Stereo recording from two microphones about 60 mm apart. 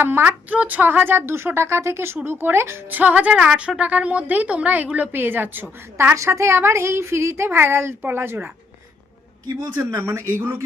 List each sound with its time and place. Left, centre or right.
0.0 s speech: right
0.3 s a woman's voice: right
2.9 s a woman's voice: right
6.1 s a woman's voice: right
9.9 s a woman's voice: right